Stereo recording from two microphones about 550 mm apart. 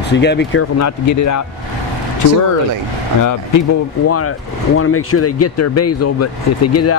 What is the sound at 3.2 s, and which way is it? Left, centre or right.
Speech, left.